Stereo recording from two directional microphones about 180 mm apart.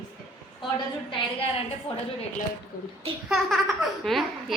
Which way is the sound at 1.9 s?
35° left (ahead or behind).